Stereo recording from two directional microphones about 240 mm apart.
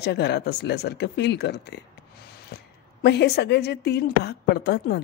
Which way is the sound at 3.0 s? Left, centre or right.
Left.